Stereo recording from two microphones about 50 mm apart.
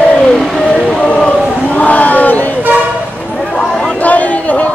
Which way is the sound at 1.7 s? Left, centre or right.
Left.